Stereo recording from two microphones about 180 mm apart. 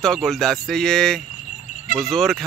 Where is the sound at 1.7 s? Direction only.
40° left (ahead or behind).